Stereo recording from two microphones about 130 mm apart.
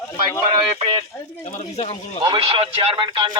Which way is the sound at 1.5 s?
60° left (ahead or behind).